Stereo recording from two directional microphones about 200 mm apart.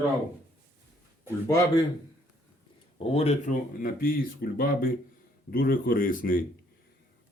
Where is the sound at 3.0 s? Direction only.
30° left (ahead or behind).